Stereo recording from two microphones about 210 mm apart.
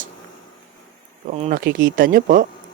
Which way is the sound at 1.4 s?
40° right (ahead or behind).